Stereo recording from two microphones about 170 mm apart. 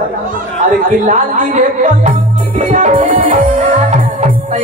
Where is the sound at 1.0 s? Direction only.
40° right (ahead or behind).